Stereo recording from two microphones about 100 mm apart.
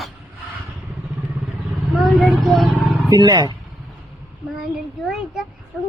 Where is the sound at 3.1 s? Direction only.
40° right (ahead or behind).